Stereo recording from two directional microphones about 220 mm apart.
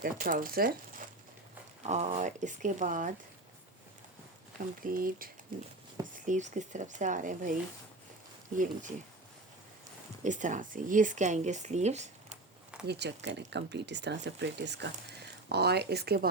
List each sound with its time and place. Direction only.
0.0 s speech: 40° right (ahead or behind)
1.8 s speech: 30° right (ahead or behind)
4.8 s speech: 40° right (ahead or behind)
10.2 s speech: 35° right (ahead or behind)
12.8 s speech: 50° right (ahead or behind)